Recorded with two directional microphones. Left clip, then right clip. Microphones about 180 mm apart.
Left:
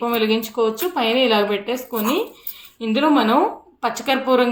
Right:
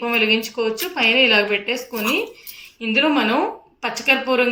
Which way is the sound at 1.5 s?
40° left (ahead or behind).